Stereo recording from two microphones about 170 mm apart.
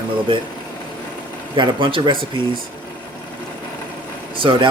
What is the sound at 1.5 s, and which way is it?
Speech, 30° right (ahead or behind).